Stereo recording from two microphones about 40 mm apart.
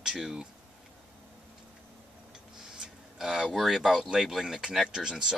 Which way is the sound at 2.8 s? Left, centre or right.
Centre.